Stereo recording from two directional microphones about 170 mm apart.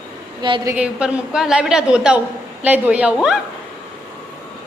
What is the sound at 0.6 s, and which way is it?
A woman's voice, 5° right (ahead or behind).